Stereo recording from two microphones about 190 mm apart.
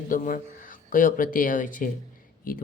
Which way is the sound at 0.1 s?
45° left (ahead or behind).